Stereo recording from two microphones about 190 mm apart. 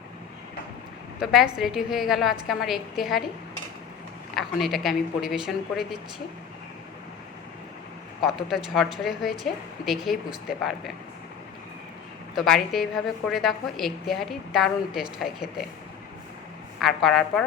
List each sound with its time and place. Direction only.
1.2 s a woman's voice: centre (ahead or behind)
4.4 s a woman's voice: centre (ahead or behind)
8.2 s a woman's voice: centre (ahead or behind)
12.4 s a woman's voice: centre (ahead or behind)
16.8 s a woman's voice: centre (ahead or behind)